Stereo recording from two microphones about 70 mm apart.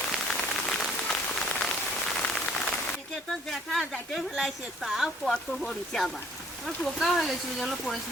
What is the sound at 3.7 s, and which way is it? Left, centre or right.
Speech, centre.